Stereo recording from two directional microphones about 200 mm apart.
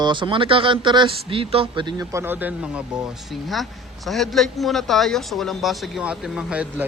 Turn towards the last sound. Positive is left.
turn(degrees=-5)  # may be behind; listen again after turning